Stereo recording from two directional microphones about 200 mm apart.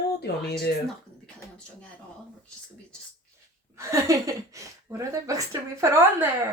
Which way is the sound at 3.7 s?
15° right (ahead or behind).